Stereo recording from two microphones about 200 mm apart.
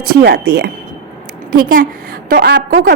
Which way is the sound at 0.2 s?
55° right (ahead or behind).